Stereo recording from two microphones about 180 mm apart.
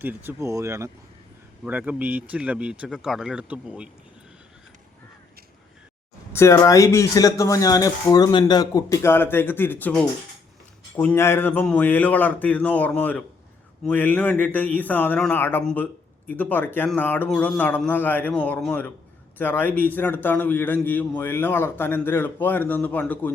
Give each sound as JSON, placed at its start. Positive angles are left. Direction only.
{"t": 0.0, "sound": "speech", "side_deg": -10}
{"t": 6.3, "sound": "a man's voice", "side_deg": 15}